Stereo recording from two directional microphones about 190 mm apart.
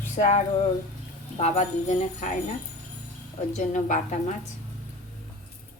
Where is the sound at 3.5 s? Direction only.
40° left (ahead or behind).